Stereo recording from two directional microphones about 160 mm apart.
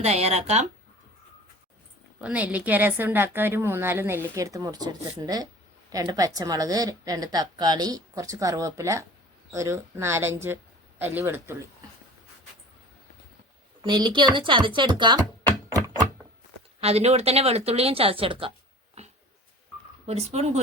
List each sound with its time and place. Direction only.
0.0 s speech: 40° right (ahead or behind)
2.2 s a woman's voice: 10° right (ahead or behind)
13.8 s a woman's voice: 30° right (ahead or behind)
16.8 s speech: 40° right (ahead or behind)
19.0 s dog: 40° right (ahead or behind)
20.1 s speech: 40° right (ahead or behind)